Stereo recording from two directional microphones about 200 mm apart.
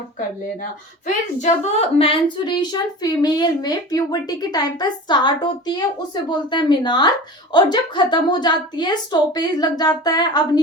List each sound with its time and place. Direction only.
0.6 s speech: 35° left (ahead or behind)
2.0 s speech: 25° left (ahead or behind)